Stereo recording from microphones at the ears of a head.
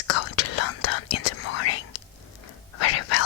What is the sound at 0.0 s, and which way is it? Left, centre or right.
Whispering, left.